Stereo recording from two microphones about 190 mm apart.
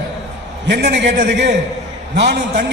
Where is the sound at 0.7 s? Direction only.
65° right (ahead or behind).